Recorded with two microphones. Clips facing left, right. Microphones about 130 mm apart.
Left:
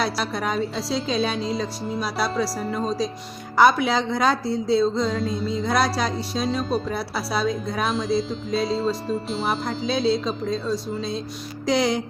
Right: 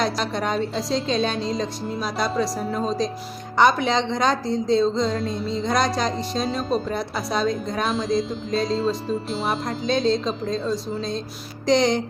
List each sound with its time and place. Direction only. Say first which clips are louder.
0.0 s a woman's voice: right 1 dB; 5° left (ahead or behind)